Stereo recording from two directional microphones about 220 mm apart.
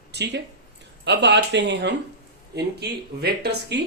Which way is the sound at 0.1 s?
50° right (ahead or behind).